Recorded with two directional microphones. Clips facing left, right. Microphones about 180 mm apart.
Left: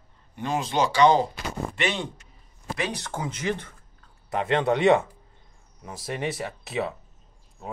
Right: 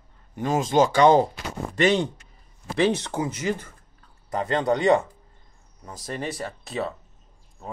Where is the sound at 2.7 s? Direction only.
25° right (ahead or behind).